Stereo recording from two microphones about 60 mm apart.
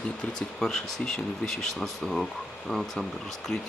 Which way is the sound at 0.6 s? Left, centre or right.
Centre.